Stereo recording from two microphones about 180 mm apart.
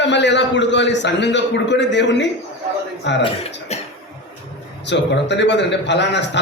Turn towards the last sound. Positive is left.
turn(degrees=75)  # may be behind; listen again after turning